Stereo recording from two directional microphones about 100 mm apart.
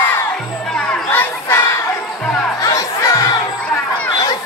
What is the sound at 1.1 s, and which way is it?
Crowd, 20° left (ahead or behind).